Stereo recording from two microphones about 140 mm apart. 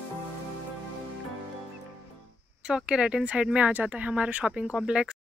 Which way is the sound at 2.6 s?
5° right (ahead or behind).